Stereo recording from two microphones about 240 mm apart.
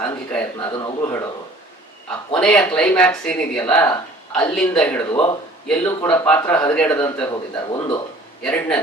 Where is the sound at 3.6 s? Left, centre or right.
Centre.